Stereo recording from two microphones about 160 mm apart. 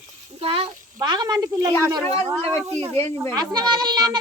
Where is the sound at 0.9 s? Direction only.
25° right (ahead or behind).